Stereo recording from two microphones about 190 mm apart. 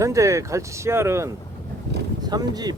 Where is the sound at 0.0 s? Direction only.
15° right (ahead or behind).